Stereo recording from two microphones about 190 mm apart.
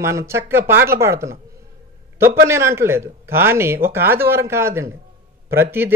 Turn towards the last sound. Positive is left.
turn(degrees=-10)  # may be behind; listen again after turning